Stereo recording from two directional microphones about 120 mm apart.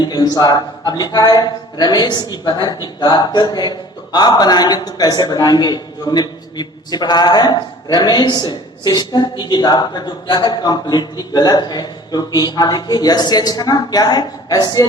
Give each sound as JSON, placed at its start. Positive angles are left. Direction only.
{"t": 0.0, "sound": "a man's voice", "side_deg": 35}